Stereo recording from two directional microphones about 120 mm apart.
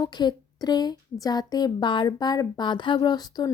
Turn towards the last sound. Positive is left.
turn(degrees=35)  # may be behind; listen again after turning